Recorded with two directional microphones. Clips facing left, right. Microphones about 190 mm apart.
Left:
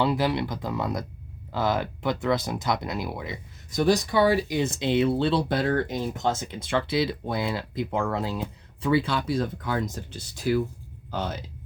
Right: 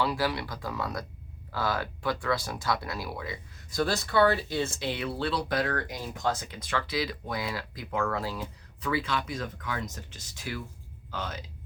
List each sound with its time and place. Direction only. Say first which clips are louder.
0.0 s speech: left 5 dB; 25° left (ahead or behind)